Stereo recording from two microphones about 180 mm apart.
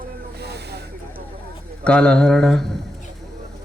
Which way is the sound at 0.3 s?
65° right (ahead or behind).